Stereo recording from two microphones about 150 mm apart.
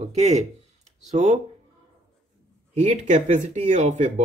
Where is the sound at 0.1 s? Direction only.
45° right (ahead or behind).